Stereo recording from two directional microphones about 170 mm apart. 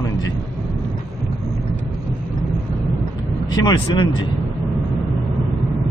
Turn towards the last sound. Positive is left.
turn(degrees=30)  # may be behind; listen again after turning